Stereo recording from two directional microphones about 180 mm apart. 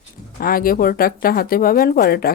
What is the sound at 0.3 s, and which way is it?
Speech, 55° left (ahead or behind).